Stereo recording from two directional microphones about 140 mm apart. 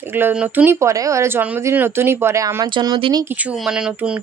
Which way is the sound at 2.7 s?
35° right (ahead or behind).